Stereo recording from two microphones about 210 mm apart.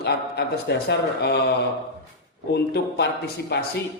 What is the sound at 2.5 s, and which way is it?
A man's voice, 50° left (ahead or behind).